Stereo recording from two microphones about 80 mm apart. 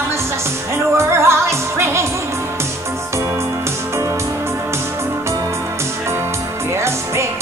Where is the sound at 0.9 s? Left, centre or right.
Right.